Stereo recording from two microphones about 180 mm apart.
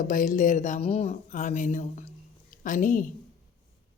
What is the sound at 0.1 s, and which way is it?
Speech, 45° left (ahead or behind).